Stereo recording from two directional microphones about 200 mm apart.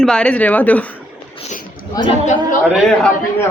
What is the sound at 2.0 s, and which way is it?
Speech, 20° left (ahead or behind).